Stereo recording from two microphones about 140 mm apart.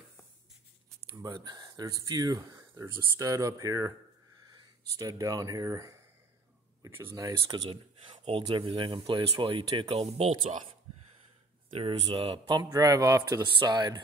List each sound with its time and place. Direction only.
1.1 s speech: 25° right (ahead or behind)
7.4 s speech: 40° right (ahead or behind)
8.5 s speech: 35° right (ahead or behind)
9.8 s speech: 45° right (ahead or behind)
10.5 s a sound: 50° right (ahead or behind)
11.7 s speech: 40° right (ahead or behind)
12.6 s speech: 25° right (ahead or behind)